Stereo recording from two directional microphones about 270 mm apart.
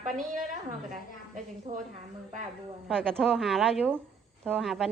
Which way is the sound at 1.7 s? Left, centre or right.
Right.